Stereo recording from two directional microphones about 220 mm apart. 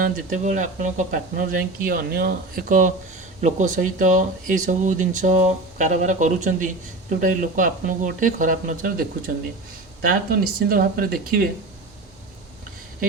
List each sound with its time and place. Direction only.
0.0 s speech: 35° right (ahead or behind)